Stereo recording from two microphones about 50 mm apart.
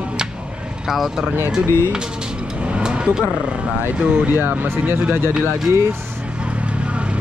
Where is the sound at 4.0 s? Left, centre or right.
Right.